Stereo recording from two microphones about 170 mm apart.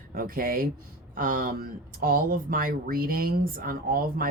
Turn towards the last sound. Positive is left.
turn(degrees=-60)  # may be behind; listen again after turning